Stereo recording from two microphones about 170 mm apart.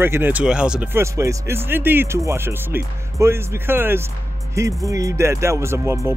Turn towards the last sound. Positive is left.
turn(degrees=-15)  # may be behind; listen again after turning